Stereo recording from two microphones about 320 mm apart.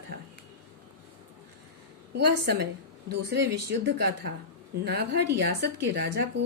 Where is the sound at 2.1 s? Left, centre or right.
Right.